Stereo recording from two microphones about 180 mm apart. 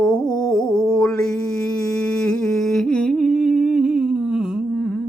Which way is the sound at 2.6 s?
Centre (ahead or behind).